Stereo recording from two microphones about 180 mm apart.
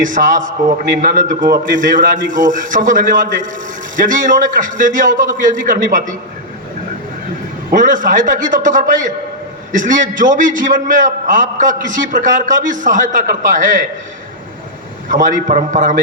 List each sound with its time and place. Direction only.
0.0 s a man's voice: 45° right (ahead or behind)
7.7 s a man's voice: 45° right (ahead or behind)
15.1 s a man's voice: 45° right (ahead or behind)